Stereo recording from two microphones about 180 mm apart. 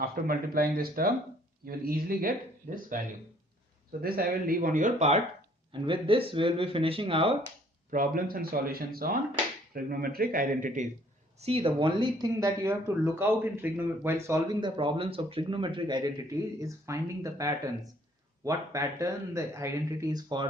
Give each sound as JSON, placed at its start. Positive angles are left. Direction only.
{"t": 0.0, "sound": "speech", "side_deg": -55}
{"t": 4.0, "sound": "speech", "side_deg": -55}
{"t": 7.9, "sound": "speech", "side_deg": -50}
{"t": 11.3, "sound": "speech", "side_deg": -35}